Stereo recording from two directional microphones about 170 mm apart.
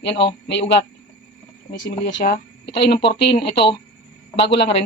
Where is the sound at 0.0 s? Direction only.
90° left.